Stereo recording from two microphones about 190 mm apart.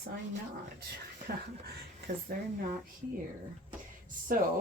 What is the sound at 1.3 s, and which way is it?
Speech, 50° right (ahead or behind).